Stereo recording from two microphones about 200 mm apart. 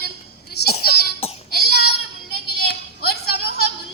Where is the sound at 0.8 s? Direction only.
50° left (ahead or behind).